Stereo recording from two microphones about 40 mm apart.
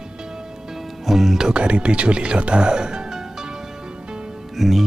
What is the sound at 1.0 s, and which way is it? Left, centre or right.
Music, centre.